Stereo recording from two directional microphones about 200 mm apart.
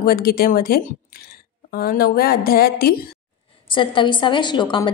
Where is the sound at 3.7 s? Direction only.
25° left (ahead or behind).